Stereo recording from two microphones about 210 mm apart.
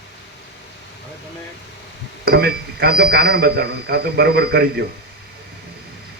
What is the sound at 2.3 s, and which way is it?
A man's voice, 50° right (ahead or behind).